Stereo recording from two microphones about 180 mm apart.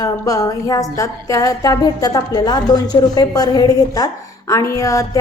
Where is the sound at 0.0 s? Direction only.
20° left (ahead or behind).